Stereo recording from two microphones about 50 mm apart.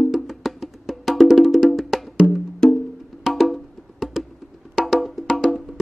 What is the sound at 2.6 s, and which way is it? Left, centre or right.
Wood block, centre.